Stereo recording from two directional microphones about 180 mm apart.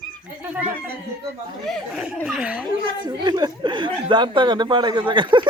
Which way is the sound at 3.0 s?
25° right (ahead or behind).